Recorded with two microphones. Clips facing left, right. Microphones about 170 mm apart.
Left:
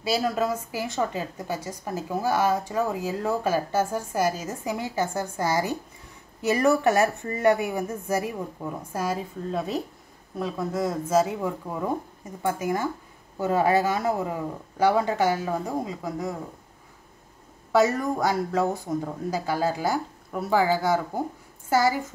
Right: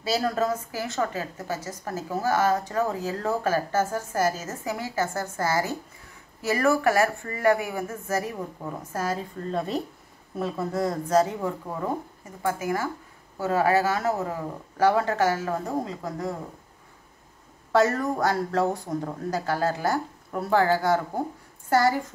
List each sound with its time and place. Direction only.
0.0 s a woman's voice: 10° left (ahead or behind)
17.7 s a woman's voice: 10° left (ahead or behind)